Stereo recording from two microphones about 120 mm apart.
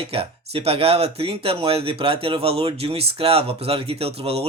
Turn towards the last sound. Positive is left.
turn(degrees=-55)  # may be behind; listen again after turning